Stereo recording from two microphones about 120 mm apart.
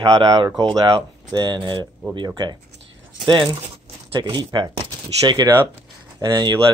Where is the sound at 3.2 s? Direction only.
40° right (ahead or behind).